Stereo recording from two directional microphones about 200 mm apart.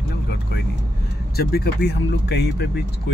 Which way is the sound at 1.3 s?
50° left (ahead or behind).